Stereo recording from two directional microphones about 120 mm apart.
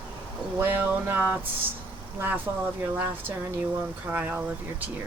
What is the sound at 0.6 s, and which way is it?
Speech, 15° right (ahead or behind).